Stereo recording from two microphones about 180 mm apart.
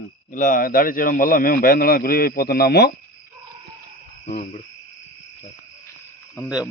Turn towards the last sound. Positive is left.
turn(degrees=20)  # may be behind; listen again after turning